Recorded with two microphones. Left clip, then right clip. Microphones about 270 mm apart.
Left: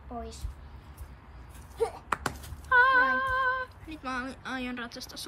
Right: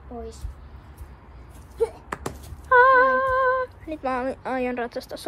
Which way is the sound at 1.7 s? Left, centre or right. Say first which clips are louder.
Right 4 dB; centre.